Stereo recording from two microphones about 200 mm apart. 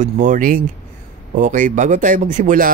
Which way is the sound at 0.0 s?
40° right (ahead or behind).